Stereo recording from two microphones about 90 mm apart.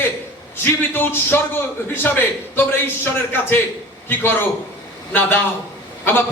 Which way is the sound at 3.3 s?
25° left (ahead or behind).